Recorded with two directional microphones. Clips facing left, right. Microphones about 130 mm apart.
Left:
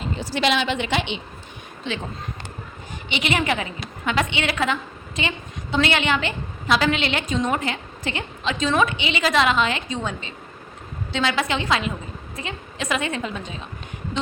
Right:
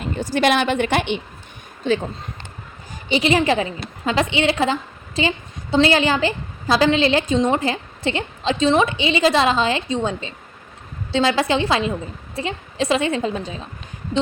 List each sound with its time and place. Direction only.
0.0 s a woman's voice: 50° right (ahead or behind)
3.1 s a woman's voice: 35° right (ahead or behind)